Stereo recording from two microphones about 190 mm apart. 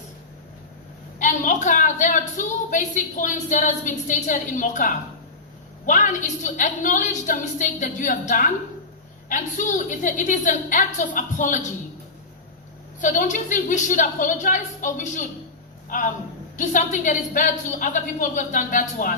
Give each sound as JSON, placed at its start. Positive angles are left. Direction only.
{"t": 1.2, "sound": "a woman's voice", "side_deg": 40}
{"t": 13.0, "sound": "a woman's voice", "side_deg": 40}
{"t": 16.6, "sound": "a woman's voice", "side_deg": 40}